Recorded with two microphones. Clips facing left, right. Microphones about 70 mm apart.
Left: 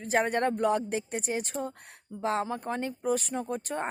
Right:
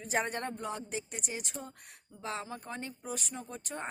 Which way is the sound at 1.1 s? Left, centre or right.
Left.